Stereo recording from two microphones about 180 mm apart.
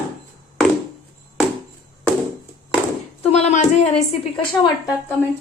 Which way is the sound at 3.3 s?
40° left (ahead or behind).